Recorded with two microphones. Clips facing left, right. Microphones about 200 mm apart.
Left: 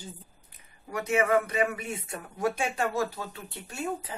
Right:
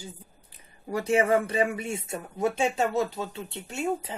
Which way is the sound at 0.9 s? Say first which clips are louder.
Right 2 dB; 30° right (ahead or behind).